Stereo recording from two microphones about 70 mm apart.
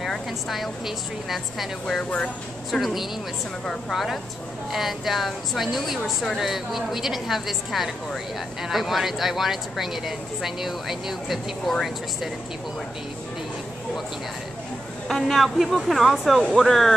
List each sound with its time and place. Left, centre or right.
0.0 s a woman's voice: centre
2.0 s speech: centre
2.7 s a woman's voice: centre
15.0 s a woman's voice: centre